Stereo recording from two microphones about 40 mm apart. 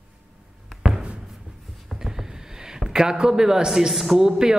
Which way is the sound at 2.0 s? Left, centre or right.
Centre.